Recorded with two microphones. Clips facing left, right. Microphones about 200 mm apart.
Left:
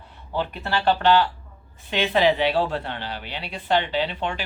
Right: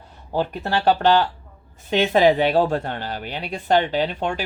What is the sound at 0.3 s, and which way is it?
Speech, 45° right (ahead or behind).